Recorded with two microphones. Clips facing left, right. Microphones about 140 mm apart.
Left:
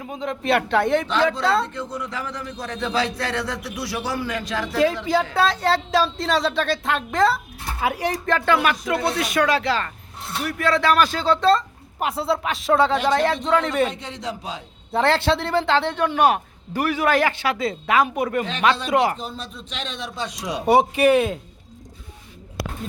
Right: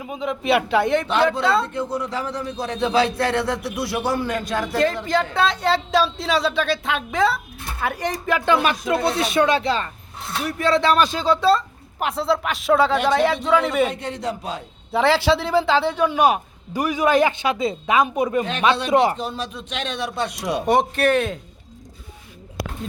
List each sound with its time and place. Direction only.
0.0 s speech: 10° right (ahead or behind)
1.0 s a man's voice: 60° right (ahead or behind)
1.3 s speech: centre (ahead or behind)
1.6 s a man's voice: 55° right (ahead or behind)
5.0 s speech: 5° left (ahead or behind)
8.3 s speech: 10° right (ahead or behind)
8.5 s speech: 25° right (ahead or behind); by 13.9 s 5° right (ahead or behind)
13.9 s a man's voice: 55° right (ahead or behind)
14.9 s speech: 5° right (ahead or behind); by 19.2 s 20° right (ahead or behind)
19.2 s speech: 75° right (ahead or behind); by 20.7 s 60° right (ahead or behind)
20.7 s speech: 10° left (ahead or behind)